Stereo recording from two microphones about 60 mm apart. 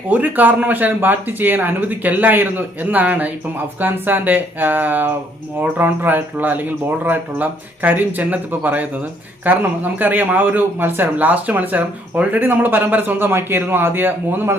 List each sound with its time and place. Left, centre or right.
0.1 s a man's voice: right